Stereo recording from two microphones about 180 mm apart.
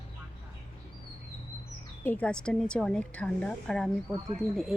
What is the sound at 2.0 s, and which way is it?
Speech, 10° left (ahead or behind).